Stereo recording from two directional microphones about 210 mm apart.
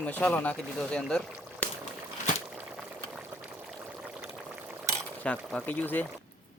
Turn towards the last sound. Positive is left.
turn(degrees=10)  # may be behind; listen again after turning